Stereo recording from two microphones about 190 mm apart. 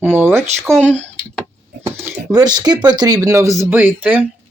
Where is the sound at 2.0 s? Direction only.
15° right (ahead or behind).